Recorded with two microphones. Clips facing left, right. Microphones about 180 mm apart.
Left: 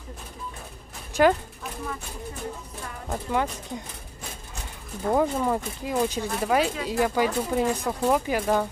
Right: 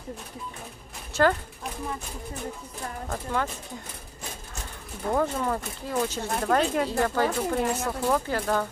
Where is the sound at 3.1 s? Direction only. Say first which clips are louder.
Left 3 dB; 15° left (ahead or behind).